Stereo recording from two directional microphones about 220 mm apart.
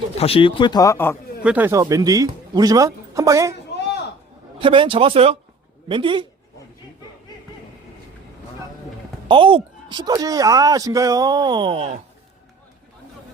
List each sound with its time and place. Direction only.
0.2 s speech: 25° left (ahead or behind)
1.5 s speech: 10° right (ahead or behind)
4.6 s speech: 25° right (ahead or behind)
9.3 s speech: 25° right (ahead or behind)